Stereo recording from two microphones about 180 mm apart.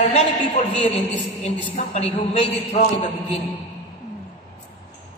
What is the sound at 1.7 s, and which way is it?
A man's voice, 35° left (ahead or behind).